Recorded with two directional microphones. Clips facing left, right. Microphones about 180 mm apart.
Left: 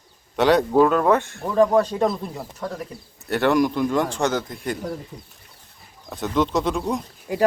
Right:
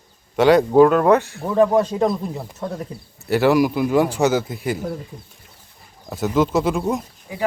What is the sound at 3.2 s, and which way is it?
Speech, centre (ahead or behind).